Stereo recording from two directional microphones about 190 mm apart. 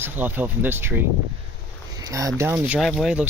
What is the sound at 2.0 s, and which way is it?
Speech, 15° right (ahead or behind).